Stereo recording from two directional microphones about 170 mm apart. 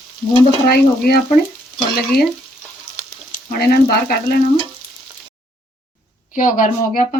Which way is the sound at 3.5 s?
65° left (ahead or behind).